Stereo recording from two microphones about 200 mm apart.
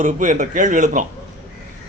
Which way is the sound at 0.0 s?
40° right (ahead or behind).